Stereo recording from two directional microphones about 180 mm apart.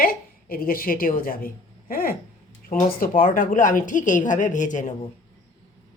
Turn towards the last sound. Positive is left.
turn(degrees=45)  # may be behind; listen again after turning